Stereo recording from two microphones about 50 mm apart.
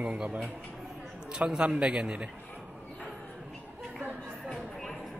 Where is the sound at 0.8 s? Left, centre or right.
Centre.